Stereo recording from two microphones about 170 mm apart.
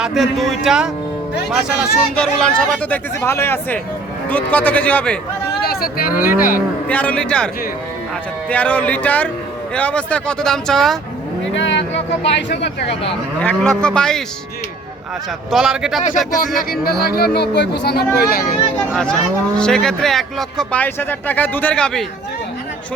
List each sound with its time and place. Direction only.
0.0 s a man's voice: centre (ahead or behind)
5.6 s speech: 60° left (ahead or behind)
6.8 s a man's voice: 10° left (ahead or behind)
11.5 s speech: 90° left
13.4 s speech: 5° left (ahead or behind)
15.4 s speech: 5° right (ahead or behind)
16.8 s speech: 65° left (ahead or behind)
19.5 s speech: 5° left (ahead or behind)